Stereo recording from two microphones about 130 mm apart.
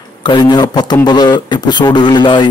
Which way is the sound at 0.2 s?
35° left (ahead or behind).